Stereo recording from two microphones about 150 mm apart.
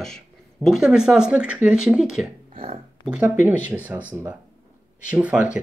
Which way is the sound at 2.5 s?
40° right (ahead or behind).